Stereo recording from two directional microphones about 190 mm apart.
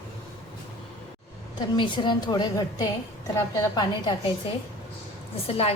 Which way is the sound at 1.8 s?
25° left (ahead or behind).